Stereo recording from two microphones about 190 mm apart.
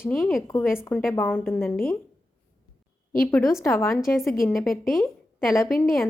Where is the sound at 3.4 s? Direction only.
15° left (ahead or behind).